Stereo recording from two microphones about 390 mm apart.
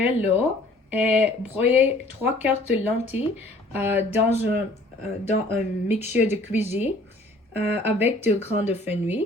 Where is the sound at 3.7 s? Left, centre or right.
Centre.